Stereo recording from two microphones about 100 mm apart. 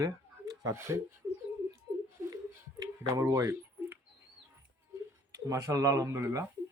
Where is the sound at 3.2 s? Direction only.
30° right (ahead or behind).